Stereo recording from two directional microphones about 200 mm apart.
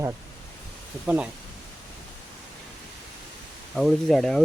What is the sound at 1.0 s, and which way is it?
Speech, 5° right (ahead or behind).